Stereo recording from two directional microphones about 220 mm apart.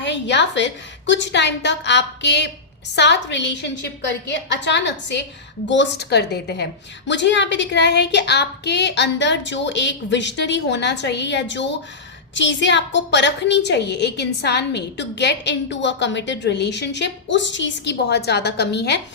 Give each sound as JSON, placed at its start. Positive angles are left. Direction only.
{"t": 0.0, "sound": "a woman's voice", "side_deg": 55}